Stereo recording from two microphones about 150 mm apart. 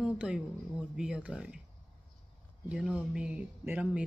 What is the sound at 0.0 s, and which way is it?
Speech, 5° right (ahead or behind).